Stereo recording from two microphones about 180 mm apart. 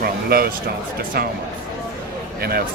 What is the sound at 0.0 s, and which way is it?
Speech, 60° right (ahead or behind).